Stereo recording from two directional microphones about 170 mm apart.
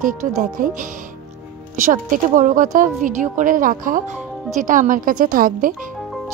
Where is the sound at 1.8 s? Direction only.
50° right (ahead or behind).